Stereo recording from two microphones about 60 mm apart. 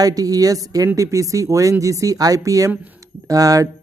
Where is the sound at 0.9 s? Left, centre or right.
Right.